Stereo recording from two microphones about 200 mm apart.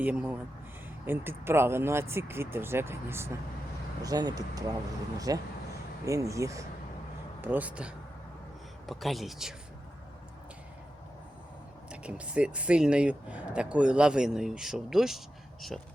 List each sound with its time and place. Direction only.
0.0 s speech: 10° right (ahead or behind)
11.9 s speech: 5° right (ahead or behind)